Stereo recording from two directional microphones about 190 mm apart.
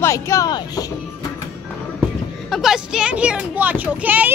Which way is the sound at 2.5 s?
Centre (ahead or behind).